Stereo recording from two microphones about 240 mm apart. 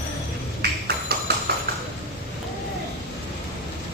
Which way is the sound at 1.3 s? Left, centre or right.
Right.